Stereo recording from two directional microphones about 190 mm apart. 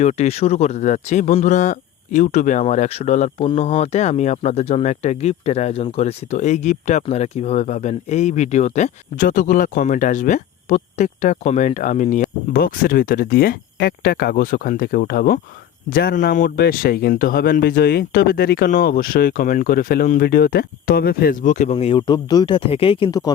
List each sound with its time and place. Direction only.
0.0 s speech: 35° left (ahead or behind)